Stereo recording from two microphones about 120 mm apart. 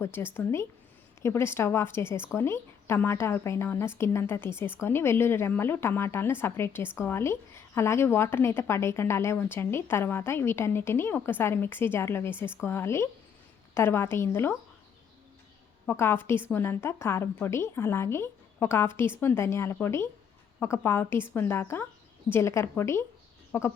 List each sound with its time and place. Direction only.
0.0 s a woman's voice: 20° left (ahead or behind)
15.9 s a woman's voice: 20° left (ahead or behind)